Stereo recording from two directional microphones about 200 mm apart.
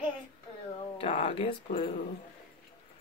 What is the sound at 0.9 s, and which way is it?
Speech, 30° left (ahead or behind).